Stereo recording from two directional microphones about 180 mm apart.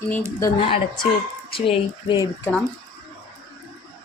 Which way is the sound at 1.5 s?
30° left (ahead or behind).